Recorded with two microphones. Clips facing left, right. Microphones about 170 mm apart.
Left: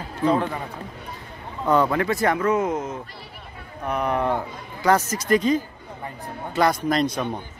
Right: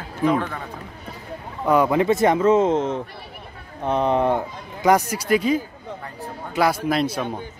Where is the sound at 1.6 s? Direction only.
10° right (ahead or behind).